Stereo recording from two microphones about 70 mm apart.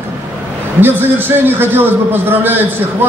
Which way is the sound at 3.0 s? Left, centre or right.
Right.